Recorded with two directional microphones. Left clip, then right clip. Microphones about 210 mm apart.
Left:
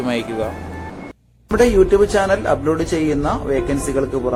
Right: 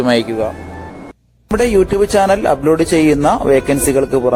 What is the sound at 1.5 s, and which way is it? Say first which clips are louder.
Speech: even; 35° right (ahead or behind).